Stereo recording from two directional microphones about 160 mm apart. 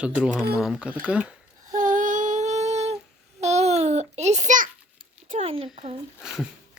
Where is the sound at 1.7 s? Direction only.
55° right (ahead or behind).